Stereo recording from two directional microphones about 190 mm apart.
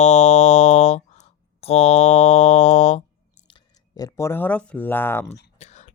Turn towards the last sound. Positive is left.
turn(degrees=35)  # may be behind; listen again after turning